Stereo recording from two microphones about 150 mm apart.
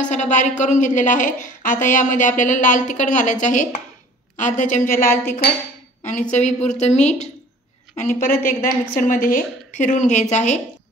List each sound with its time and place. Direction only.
0.1 s a woman's voice: 55° left (ahead or behind)
6.0 s a woman's voice: 50° left (ahead or behind)